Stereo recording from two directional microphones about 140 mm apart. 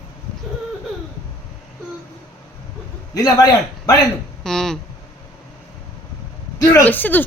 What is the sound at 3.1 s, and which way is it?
Speech, 25° left (ahead or behind).